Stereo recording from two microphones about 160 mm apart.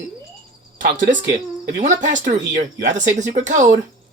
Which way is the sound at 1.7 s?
50° right (ahead or behind).